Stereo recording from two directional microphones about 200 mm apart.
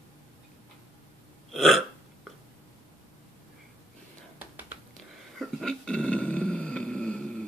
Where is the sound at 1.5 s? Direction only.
Centre (ahead or behind).